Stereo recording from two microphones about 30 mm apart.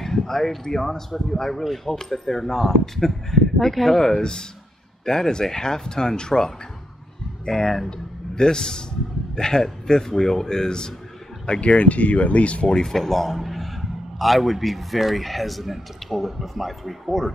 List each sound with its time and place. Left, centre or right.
0.0 s speech: centre
4.1 s speech: left
5.0 s speech: centre
7.4 s speech: centre
8.4 s speech: left
11.6 s speech: left
12.6 s speech: centre
13.3 s speech: centre